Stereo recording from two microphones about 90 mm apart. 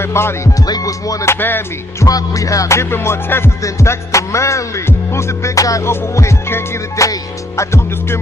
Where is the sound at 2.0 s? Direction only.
40° left (ahead or behind).